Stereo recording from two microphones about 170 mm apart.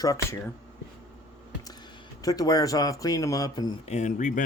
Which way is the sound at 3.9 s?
45° left (ahead or behind).